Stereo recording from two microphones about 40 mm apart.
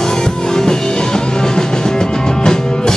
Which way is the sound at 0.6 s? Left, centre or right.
Centre.